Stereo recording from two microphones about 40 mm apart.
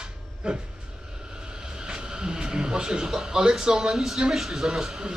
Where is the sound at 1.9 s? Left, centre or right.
Right.